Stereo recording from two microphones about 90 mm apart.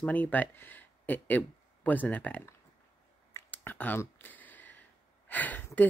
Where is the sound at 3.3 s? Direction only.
25° left (ahead or behind).